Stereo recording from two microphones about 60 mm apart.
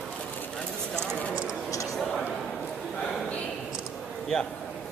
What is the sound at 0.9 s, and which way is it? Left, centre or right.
Speech, right.